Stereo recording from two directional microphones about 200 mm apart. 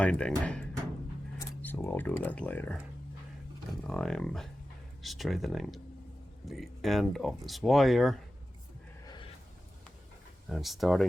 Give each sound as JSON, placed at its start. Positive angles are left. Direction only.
{"t": 0.0, "sound": "speech", "side_deg": 5}
{"t": 9.0, "sound": "a sound", "side_deg": 25}
{"t": 10.5, "sound": "speech", "side_deg": 0}